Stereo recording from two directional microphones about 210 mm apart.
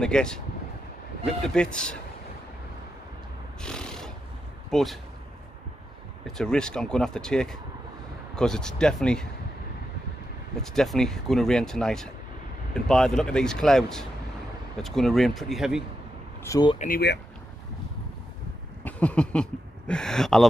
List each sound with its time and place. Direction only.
0.0 s speech: 5° left (ahead or behind)
3.6 s a sound: 5° left (ahead or behind)
4.6 s speech: centre (ahead or behind)
6.2 s speech: centre (ahead or behind)
10.6 s speech: centre (ahead or behind)
16.4 s speech: 20° left (ahead or behind)
16.7 s speech: 40° left (ahead or behind)
18.9 s a sound: 5° left (ahead or behind)
19.9 s speech: 5° left (ahead or behind)